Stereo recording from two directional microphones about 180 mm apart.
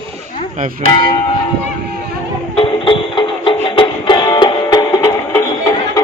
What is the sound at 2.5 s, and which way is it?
Music, 30° left (ahead or behind).